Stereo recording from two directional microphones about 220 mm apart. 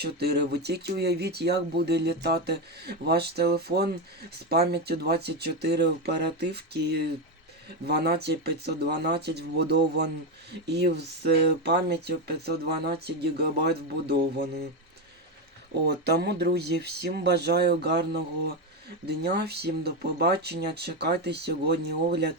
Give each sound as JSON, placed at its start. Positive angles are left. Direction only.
{"t": 0.0, "sound": "speech", "side_deg": -45}
{"t": 15.9, "sound": "speech", "side_deg": -50}